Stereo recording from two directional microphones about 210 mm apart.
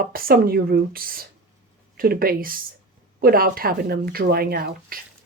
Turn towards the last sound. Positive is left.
turn(degrees=-45)  # may be behind; listen again after turning